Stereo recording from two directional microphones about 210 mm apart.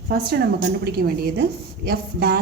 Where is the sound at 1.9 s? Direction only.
45° right (ahead or behind).